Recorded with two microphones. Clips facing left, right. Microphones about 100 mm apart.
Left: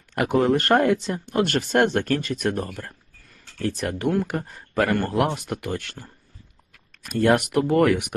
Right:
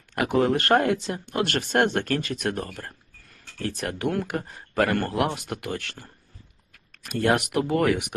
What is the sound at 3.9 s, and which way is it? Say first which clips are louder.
Speech: left 2 dB; 30° left (ahead or behind).